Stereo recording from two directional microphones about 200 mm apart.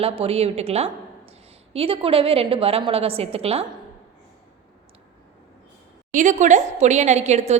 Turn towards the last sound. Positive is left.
turn(degrees=-35)  # may be behind; listen again after turning